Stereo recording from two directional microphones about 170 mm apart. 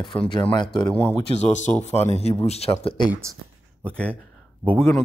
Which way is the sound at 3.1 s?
15° right (ahead or behind).